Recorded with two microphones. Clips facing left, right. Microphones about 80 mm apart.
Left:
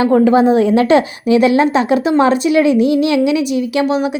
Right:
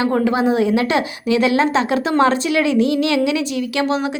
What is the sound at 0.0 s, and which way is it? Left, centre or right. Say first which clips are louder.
A woman's voice: left 6 dB; left.